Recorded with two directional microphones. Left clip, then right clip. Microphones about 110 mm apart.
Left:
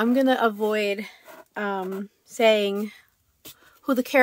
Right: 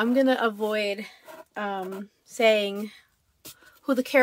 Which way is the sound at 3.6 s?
35° left (ahead or behind).